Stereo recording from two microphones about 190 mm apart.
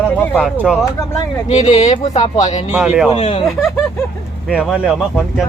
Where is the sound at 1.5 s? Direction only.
35° left (ahead or behind).